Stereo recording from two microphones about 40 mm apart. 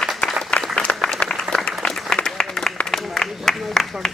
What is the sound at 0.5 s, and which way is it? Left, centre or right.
Applause, left.